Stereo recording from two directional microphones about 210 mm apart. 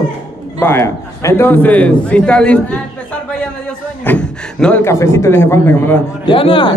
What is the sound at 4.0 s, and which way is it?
A man's voice, 5° left (ahead or behind).